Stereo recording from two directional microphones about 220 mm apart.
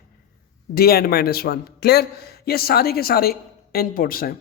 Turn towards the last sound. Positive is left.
turn(degrees=40)  # may be behind; listen again after turning